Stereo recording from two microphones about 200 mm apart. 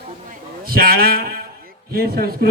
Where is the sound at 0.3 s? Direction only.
50° right (ahead or behind).